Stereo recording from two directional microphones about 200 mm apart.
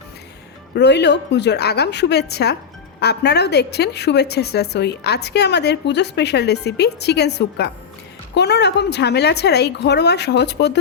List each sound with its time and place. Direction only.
0.8 s a woman's voice: 60° left (ahead or behind)